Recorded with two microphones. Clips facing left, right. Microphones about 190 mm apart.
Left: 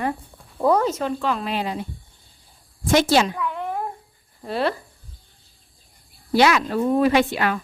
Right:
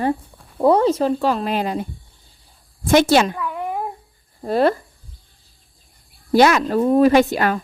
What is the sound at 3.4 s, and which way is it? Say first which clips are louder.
Cat: right 1 dB; 5° right (ahead or behind).